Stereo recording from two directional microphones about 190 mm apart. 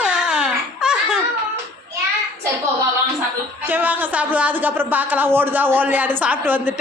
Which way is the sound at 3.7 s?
10° right (ahead or behind).